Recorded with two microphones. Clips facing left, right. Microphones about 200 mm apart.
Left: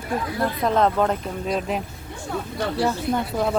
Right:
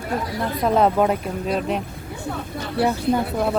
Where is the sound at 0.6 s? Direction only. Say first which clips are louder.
Right 3 dB; 10° right (ahead or behind).